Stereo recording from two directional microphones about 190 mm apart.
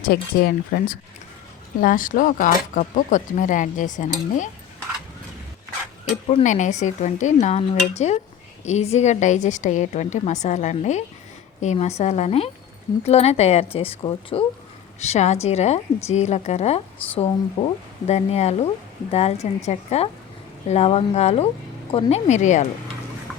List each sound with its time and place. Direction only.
0.0 s speech: 55° left (ahead or behind)
6.1 s speech: 35° left (ahead or behind)